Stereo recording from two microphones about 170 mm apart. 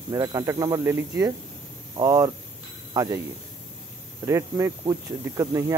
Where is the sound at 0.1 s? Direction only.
20° right (ahead or behind).